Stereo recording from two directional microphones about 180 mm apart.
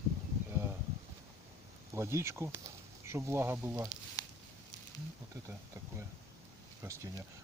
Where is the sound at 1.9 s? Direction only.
15° right (ahead or behind).